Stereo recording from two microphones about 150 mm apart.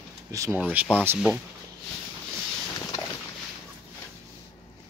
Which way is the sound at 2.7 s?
25° left (ahead or behind).